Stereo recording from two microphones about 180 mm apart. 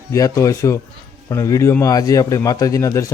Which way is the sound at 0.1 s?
20° left (ahead or behind).